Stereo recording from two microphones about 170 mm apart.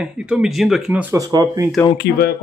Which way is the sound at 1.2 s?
20° right (ahead or behind).